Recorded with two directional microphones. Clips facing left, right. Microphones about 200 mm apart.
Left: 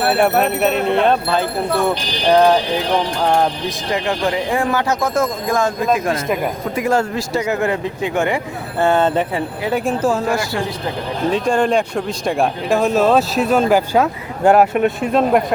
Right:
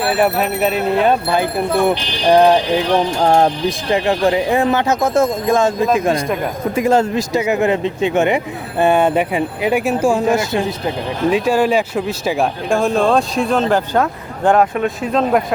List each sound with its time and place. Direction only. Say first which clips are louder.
0.2 s speech: even; centre (ahead or behind)
3.9 s speech: right 4 dB; 25° right (ahead or behind)
6.2 s speech: even; 5° left (ahead or behind)
6.7 s speech: right 4 dB; 25° right (ahead or behind)
11.3 s speech: right 2 dB; 5° right (ahead or behind)